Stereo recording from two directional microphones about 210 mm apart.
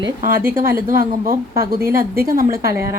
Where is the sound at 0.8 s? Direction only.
40° right (ahead or behind).